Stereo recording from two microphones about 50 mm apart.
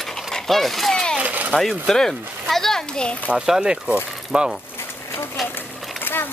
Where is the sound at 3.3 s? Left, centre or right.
Centre.